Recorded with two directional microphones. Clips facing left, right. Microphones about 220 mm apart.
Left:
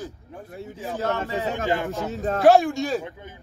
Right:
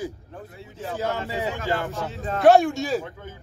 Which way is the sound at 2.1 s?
45° left (ahead or behind).